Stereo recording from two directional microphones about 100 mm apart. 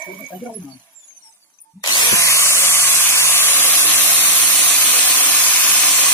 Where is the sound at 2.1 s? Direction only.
30° left (ahead or behind).